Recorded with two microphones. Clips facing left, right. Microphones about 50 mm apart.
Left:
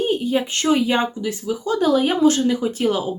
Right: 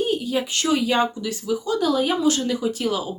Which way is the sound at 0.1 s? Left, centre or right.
Left.